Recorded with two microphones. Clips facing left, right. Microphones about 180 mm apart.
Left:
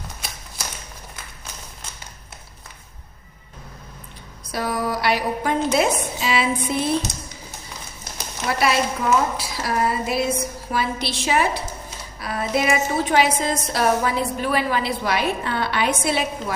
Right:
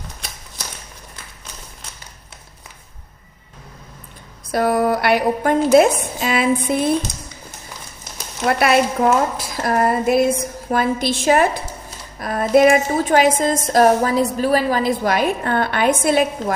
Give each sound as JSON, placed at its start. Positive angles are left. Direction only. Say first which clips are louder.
{"t": 4.5, "sound": "a sound", "louder": "right 7 dB", "side_deg": -55}
{"t": 5.7, "sound": "a woman's voice", "louder": "right 8 dB", "side_deg": -50}
{"t": 8.4, "sound": "a woman's voice", "louder": "right 5 dB", "side_deg": -60}